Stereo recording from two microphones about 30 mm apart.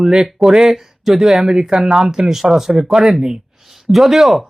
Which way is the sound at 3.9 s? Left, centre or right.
Centre.